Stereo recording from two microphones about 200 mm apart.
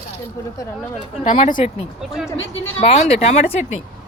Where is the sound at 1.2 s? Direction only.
35° left (ahead or behind).